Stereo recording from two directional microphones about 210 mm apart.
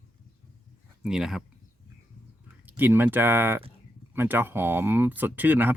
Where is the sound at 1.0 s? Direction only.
Centre (ahead or behind).